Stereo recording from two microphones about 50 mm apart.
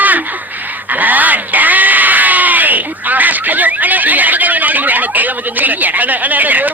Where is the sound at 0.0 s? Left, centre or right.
Right.